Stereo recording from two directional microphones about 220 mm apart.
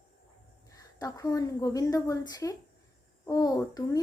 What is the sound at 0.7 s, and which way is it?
A woman's voice, 15° left (ahead or behind).